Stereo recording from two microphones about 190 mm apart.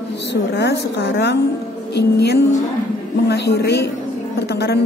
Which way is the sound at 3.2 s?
60° left (ahead or behind).